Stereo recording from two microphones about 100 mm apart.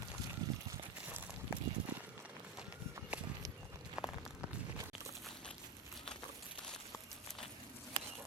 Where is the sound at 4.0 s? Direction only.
5° right (ahead or behind).